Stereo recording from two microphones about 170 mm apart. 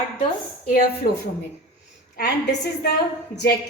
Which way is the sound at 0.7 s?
60° left (ahead or behind).